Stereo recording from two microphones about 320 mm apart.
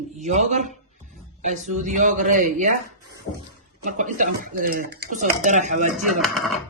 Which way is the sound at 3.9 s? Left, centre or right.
Right.